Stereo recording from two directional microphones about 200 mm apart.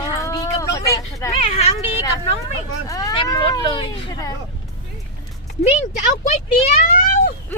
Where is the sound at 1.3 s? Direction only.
30° left (ahead or behind).